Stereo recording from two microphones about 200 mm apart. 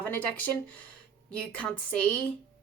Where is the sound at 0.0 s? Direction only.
5° left (ahead or behind).